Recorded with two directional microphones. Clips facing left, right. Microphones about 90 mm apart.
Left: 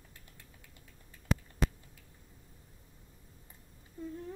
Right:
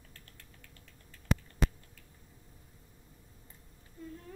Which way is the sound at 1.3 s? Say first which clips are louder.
Right 1 dB; centre (ahead or behind).